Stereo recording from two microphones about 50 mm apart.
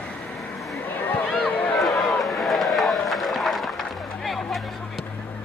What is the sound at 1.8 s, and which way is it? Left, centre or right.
Run, centre.